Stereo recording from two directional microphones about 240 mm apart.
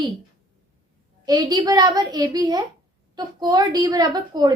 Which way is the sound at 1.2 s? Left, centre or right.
Centre.